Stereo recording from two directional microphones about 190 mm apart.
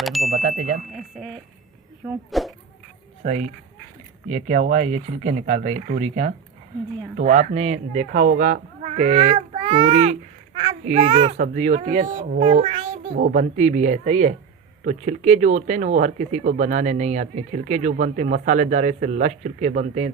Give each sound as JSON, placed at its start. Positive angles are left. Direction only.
{"t": 0.0, "sound": "a sound", "side_deg": 0}
{"t": 0.3, "sound": "speech", "side_deg": -40}
{"t": 2.3, "sound": "speech", "side_deg": 0}
{"t": 3.2, "sound": "speech", "side_deg": -40}
{"t": 8.8, "sound": "speech", "side_deg": -35}
{"t": 9.5, "sound": "child singing", "side_deg": -25}
{"t": 9.9, "sound": "a sound", "side_deg": -40}
{"t": 10.8, "sound": "speech", "side_deg": -40}
{"t": 11.1, "sound": "a child's voice", "side_deg": -25}
{"t": 11.3, "sound": "a child's voice", "side_deg": -40}
{"t": 13.1, "sound": "speech", "side_deg": -45}